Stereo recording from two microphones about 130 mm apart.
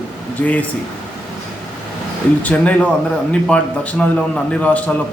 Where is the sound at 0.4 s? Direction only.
10° left (ahead or behind).